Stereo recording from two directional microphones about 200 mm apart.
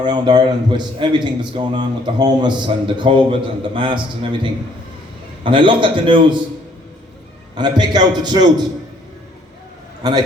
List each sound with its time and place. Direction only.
0.0 s a man's voice: 20° right (ahead or behind)
5.4 s a man's voice: 25° right (ahead or behind)
7.5 s a man's voice: 20° right (ahead or behind)
10.0 s a man's voice: 20° right (ahead or behind)